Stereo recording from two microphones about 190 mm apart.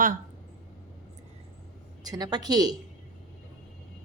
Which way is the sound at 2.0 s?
20° right (ahead or behind).